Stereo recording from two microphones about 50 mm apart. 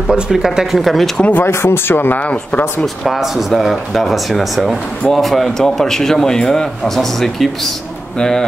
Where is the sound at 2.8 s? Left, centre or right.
Centre.